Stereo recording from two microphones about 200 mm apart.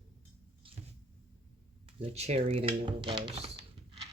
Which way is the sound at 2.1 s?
35° right (ahead or behind).